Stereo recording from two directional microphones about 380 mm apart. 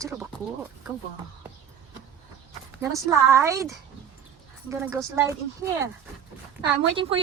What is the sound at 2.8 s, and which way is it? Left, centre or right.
A woman's voice, centre.